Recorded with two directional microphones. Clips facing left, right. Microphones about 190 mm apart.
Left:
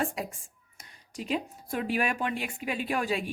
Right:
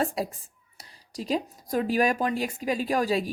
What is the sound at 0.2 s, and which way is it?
A woman's voice, 35° right (ahead or behind).